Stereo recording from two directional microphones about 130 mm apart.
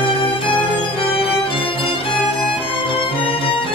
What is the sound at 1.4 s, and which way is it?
Music, 45° left (ahead or behind).